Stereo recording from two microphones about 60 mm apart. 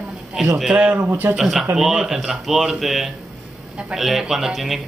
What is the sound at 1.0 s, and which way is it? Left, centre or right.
Speech, right.